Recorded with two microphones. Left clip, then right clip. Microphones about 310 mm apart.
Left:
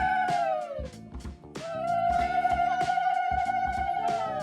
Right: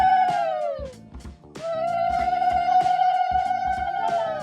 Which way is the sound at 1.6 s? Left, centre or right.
Centre.